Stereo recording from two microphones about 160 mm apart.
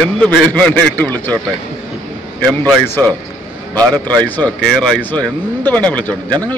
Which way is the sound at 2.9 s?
10° left (ahead or behind).